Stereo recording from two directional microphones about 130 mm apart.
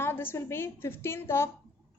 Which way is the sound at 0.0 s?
15° left (ahead or behind).